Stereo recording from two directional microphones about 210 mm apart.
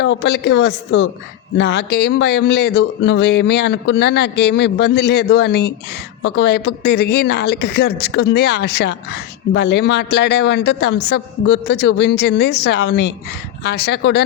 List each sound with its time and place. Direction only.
0.0 s a woman's voice: 55° left (ahead or behind)